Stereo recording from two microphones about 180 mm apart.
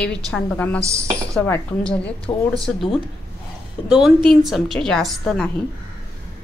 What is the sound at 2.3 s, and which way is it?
Speech, 25° left (ahead or behind).